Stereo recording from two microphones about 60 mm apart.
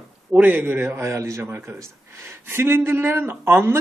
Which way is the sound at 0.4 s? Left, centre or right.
Right.